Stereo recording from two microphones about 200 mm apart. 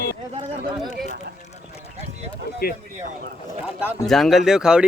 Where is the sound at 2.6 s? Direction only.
50° left (ahead or behind).